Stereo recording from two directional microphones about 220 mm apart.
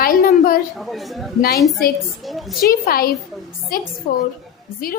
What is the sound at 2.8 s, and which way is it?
A woman's voice, 40° left (ahead or behind).